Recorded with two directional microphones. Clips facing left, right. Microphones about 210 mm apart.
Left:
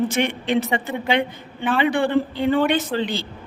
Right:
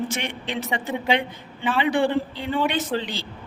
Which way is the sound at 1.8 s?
55° left (ahead or behind).